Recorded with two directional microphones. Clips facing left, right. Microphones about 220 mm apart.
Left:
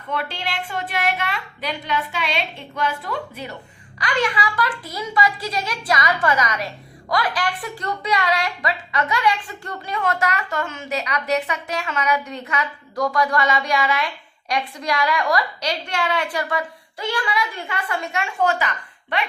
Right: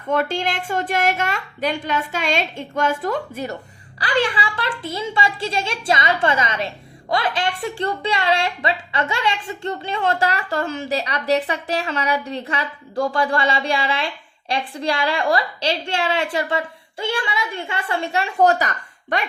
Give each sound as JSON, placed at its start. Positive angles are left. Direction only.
{"t": 0.1, "sound": "a woman's voice", "side_deg": -45}
{"t": 4.0, "sound": "a woman's voice", "side_deg": -30}